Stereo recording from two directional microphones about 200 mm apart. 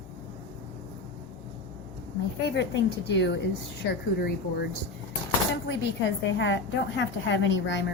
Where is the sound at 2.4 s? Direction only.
60° left (ahead or behind).